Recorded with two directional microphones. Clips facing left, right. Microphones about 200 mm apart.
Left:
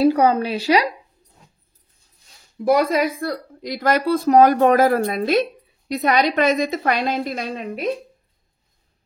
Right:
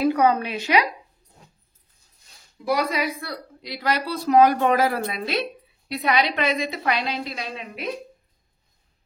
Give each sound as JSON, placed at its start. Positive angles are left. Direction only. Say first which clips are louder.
{"t": 0.0, "sound": "a woman's voice", "louder": "left 4 dB", "side_deg": 35}
{"t": 2.6, "sound": "a woman's voice", "louder": "left 6 dB", "side_deg": 50}